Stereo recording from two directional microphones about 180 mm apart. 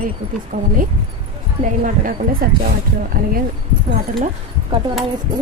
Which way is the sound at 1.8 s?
50° right (ahead or behind).